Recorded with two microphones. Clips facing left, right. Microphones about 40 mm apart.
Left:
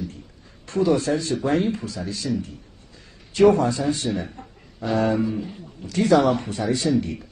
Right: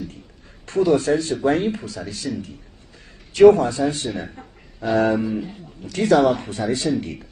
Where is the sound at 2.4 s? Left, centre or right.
Right.